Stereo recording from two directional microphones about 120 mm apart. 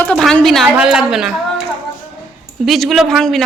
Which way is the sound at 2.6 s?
Centre (ahead or behind).